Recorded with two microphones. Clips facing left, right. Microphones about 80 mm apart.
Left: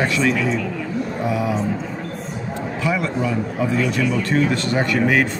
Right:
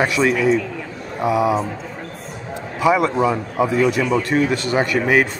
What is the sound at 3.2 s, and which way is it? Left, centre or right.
Speech, right.